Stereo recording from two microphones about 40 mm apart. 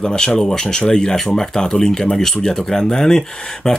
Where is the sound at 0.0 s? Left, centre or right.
Centre.